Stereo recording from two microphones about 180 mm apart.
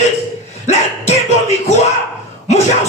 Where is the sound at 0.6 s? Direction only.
40° left (ahead or behind).